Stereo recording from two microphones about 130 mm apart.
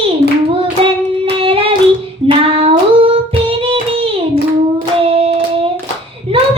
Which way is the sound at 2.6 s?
45° right (ahead or behind).